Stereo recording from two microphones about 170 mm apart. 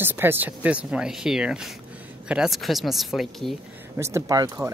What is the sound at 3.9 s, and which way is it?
Speech, 15° right (ahead or behind).